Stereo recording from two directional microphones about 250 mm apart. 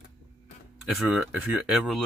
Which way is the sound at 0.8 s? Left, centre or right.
Centre.